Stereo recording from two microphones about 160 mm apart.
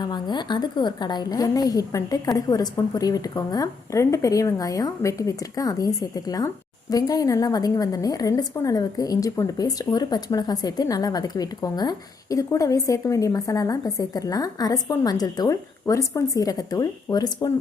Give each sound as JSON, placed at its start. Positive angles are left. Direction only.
{"t": 0.0, "sound": "a woman's voice", "side_deg": 25}